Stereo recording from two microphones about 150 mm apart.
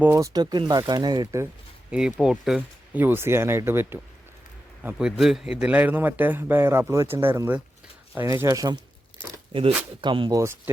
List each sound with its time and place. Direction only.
0.0 s speech: 20° right (ahead or behind)
1.9 s a man's voice: 5° right (ahead or behind); by 8.8 s 20° right (ahead or behind)
9.5 s speech: 35° right (ahead or behind)
10.3 s speech: 20° right (ahead or behind)